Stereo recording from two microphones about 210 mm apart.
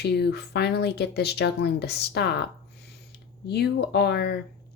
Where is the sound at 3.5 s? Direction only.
50° left (ahead or behind).